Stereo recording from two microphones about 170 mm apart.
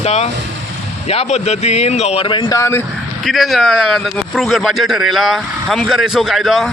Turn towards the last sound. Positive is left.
turn(degrees=0)  # may be behind; listen again after turning